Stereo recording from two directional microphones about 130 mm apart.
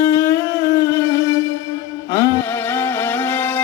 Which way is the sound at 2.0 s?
20° left (ahead or behind).